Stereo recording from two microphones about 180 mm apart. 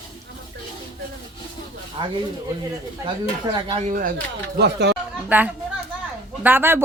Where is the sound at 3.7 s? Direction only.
45° right (ahead or behind).